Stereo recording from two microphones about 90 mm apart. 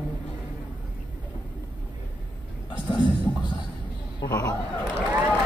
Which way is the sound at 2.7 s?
55° left (ahead or behind).